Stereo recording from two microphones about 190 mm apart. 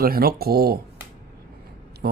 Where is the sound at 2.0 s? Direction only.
55° right (ahead or behind).